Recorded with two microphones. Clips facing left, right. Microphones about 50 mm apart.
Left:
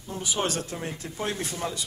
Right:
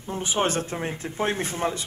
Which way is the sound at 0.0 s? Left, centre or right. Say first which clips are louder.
Right 4 dB; right.